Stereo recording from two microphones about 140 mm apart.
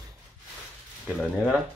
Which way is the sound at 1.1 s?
10° right (ahead or behind).